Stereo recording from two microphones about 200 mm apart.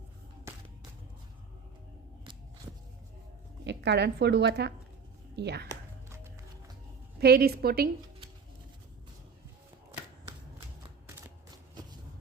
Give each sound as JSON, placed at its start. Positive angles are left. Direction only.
{"t": 3.6, "sound": "a woman's voice", "side_deg": -60}
{"t": 7.2, "sound": "a woman's voice", "side_deg": -50}
{"t": 11.1, "sound": "a sound", "side_deg": -20}